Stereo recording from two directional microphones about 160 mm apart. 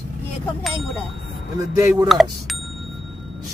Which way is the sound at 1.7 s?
15° right (ahead or behind).